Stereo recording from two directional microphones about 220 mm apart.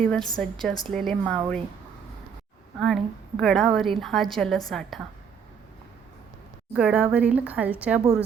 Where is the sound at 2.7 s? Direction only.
Centre (ahead or behind).